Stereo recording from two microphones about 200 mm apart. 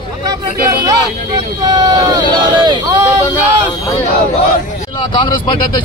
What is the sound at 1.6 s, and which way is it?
Speech, 20° right (ahead or behind).